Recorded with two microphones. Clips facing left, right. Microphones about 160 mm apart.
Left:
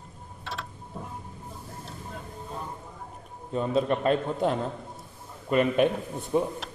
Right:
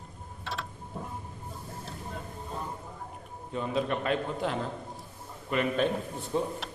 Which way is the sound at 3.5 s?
30° left (ahead or behind).